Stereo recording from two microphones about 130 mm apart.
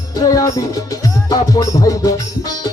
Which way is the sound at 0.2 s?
30° left (ahead or behind).